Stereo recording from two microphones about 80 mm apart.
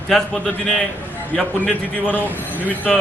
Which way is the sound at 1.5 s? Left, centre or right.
Centre.